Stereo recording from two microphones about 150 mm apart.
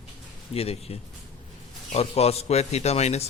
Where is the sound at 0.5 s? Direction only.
45° left (ahead or behind).